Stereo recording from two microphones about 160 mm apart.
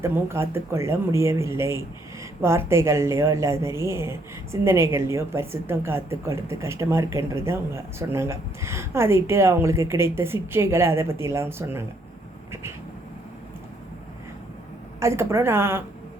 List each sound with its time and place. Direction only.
0.0 s a woman's voice: 15° right (ahead or behind)
15.0 s a woman's voice: 15° right (ahead or behind)